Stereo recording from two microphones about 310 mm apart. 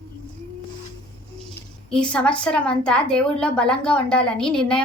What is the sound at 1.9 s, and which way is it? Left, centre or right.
A woman's voice, centre.